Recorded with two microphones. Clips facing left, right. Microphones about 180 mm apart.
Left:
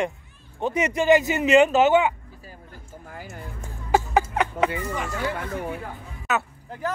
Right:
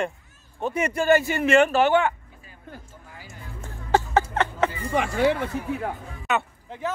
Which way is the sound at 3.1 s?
50° left (ahead or behind).